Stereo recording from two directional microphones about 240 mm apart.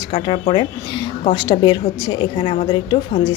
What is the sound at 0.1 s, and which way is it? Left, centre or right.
A woman's voice, left.